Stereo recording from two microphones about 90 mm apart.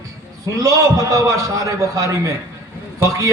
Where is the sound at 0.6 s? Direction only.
40° right (ahead or behind).